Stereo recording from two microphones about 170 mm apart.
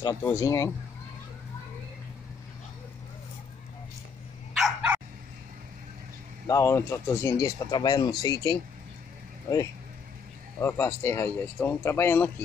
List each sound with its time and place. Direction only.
0.0 s speech: 20° left (ahead or behind)
4.6 s dog: 5° right (ahead or behind)
6.4 s speech: 15° left (ahead or behind)
10.6 s speech: 15° left (ahead or behind)